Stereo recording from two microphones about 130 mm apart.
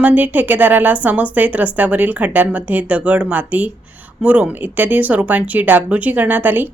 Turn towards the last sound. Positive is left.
turn(degrees=-15)  # may be behind; listen again after turning